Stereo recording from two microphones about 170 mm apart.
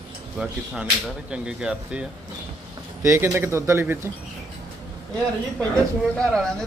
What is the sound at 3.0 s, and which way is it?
Speech, 15° right (ahead or behind).